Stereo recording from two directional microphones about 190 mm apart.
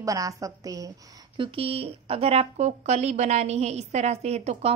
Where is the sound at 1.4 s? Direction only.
30° right (ahead or behind).